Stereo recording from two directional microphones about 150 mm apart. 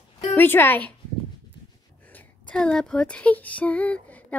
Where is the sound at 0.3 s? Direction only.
15° left (ahead or behind).